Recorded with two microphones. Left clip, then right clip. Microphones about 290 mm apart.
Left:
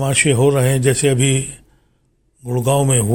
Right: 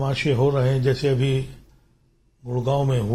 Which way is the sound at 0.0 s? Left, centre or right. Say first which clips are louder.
Left 7 dB; left.